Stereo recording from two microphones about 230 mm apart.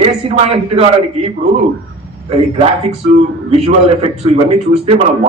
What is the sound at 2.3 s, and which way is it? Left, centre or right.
A man's voice, right.